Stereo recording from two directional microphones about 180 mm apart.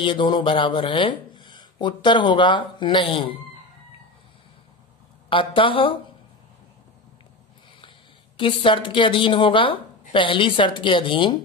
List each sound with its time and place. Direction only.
0.0 s speech: 30° left (ahead or behind)
5.3 s speech: 30° left (ahead or behind)
8.4 s speech: 30° left (ahead or behind)